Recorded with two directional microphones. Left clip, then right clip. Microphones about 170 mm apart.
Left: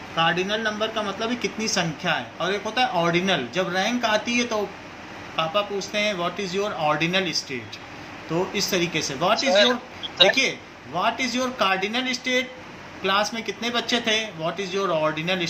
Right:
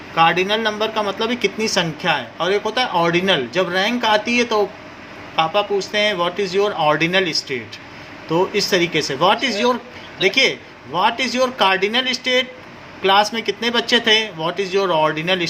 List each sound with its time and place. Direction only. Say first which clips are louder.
0.2 s speech: right 7 dB; 60° right (ahead or behind)